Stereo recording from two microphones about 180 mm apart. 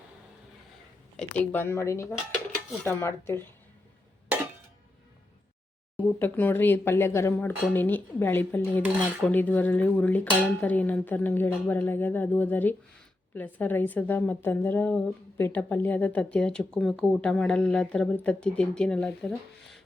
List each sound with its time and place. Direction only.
1.1 s a woman's voice: 10° left (ahead or behind)
6.0 s a woman's voice: 10° left (ahead or behind)